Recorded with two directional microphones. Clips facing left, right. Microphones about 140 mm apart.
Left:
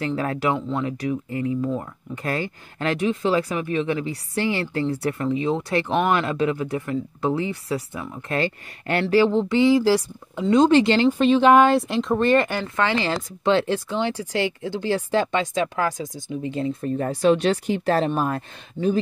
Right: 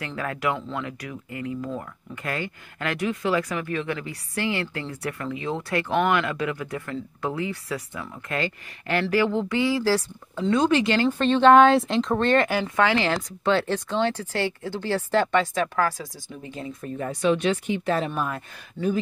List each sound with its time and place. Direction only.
0.0 s speech: 30° left (ahead or behind)
11.1 s speech: 10° left (ahead or behind)
12.4 s speech: 5° right (ahead or behind)
13.4 s speech: 20° left (ahead or behind)